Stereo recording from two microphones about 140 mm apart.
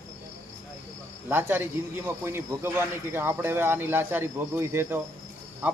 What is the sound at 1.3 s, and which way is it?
A man's voice, 15° right (ahead or behind).